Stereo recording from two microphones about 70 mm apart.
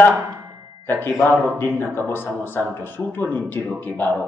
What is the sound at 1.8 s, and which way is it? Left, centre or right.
Speech, left.